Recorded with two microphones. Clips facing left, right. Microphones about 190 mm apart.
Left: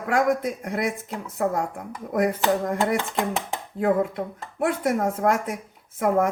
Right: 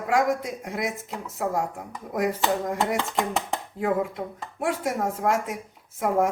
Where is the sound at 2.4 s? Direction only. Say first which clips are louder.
Left 2 dB; centre (ahead or behind).